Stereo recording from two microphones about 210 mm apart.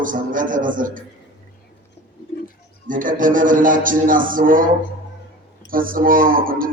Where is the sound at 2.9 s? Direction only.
40° right (ahead or behind).